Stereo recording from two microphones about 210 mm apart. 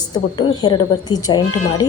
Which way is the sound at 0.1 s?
20° left (ahead or behind).